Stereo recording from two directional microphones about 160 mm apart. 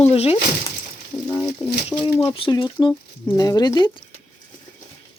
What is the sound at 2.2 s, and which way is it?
Speech, 35° left (ahead or behind).